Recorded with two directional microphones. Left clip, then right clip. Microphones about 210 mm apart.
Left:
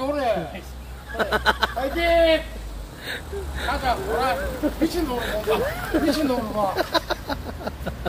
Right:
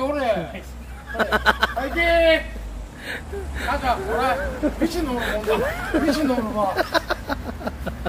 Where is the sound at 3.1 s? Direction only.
5° right (ahead or behind).